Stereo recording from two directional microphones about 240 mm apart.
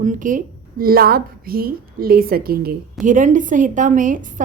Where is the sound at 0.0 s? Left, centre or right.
Right.